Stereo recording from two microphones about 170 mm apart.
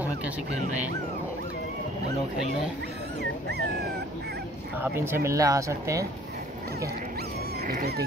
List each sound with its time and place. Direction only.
3.2 s dog: 75° right (ahead or behind)
4.8 s speech: 15° right (ahead or behind)
7.6 s dog: 65° right (ahead or behind)